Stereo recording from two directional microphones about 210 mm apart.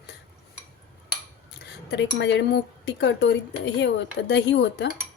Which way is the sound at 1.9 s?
55° left (ahead or behind).